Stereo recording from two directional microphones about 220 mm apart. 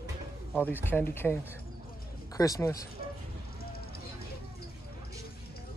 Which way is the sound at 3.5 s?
45° left (ahead or behind).